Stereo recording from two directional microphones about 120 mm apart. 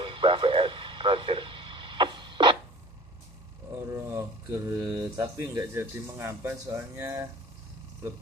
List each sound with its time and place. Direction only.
0.0 s radio: 45° right (ahead or behind)
3.9 s speech: 25° right (ahead or behind)
5.8 s speech: 20° right (ahead or behind)